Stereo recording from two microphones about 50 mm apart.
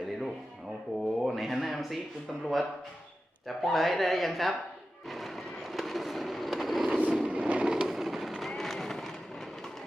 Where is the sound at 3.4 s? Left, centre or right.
Centre.